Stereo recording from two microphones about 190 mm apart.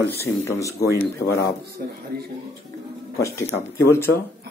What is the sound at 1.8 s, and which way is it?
Speech, 50° right (ahead or behind).